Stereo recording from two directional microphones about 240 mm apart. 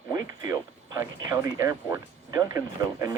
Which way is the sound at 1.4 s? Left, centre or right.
Centre.